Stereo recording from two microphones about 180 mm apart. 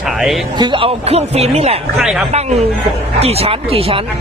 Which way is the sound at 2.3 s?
35° right (ahead or behind).